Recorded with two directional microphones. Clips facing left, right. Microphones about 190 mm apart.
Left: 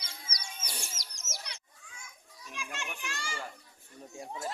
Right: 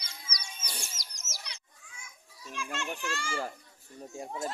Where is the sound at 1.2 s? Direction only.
50° left (ahead or behind).